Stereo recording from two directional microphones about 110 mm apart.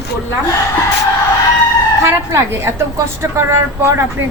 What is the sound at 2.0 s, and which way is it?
A woman's voice, 25° right (ahead or behind).